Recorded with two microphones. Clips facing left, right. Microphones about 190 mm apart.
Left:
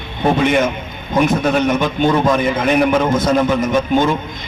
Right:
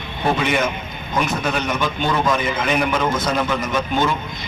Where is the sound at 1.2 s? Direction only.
50° left (ahead or behind).